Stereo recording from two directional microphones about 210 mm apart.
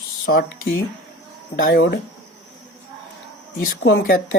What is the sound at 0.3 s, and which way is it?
Speech, 45° left (ahead or behind).